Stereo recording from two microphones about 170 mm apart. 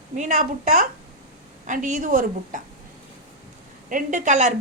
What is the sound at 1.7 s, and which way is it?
Speech, 50° right (ahead or behind).